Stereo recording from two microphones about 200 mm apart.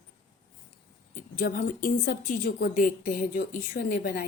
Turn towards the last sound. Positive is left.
turn(degrees=45)  # may be behind; listen again after turning